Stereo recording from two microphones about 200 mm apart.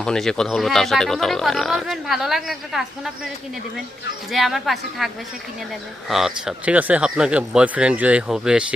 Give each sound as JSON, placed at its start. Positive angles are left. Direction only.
{"t": 0.0, "sound": "speech", "side_deg": 5}
{"t": 4.3, "sound": "speech", "side_deg": 0}